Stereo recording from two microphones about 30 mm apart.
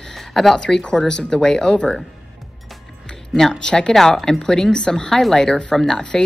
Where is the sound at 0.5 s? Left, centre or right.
Left.